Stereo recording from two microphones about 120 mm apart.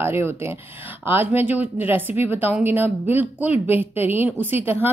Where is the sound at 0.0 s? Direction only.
20° right (ahead or behind).